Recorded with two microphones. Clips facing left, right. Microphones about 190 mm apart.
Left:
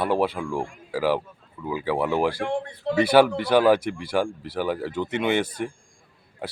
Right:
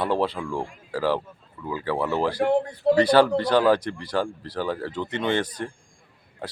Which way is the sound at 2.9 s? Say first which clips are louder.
Even; 10° left (ahead or behind).